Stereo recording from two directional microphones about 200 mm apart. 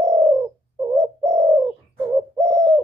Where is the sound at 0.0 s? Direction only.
15° right (ahead or behind).